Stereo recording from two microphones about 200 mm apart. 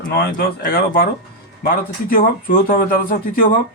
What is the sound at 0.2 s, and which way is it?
A man's voice, 50° left (ahead or behind).